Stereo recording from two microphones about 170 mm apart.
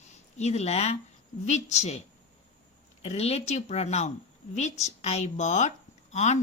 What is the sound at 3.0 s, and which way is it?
A woman's voice, 40° left (ahead or behind).